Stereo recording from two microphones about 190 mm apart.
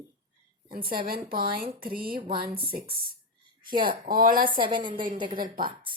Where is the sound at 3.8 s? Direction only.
50° right (ahead or behind).